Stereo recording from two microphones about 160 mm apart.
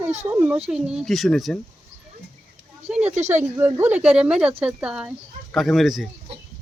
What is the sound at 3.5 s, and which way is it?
Speech, 15° right (ahead or behind).